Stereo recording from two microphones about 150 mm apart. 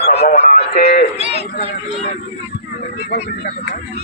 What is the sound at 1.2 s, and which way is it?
Speech, 45° left (ahead or behind).